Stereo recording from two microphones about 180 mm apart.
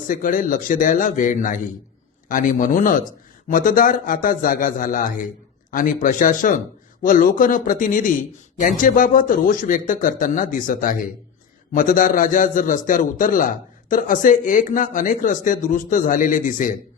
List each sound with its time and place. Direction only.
0.1 s speech: 50° left (ahead or behind)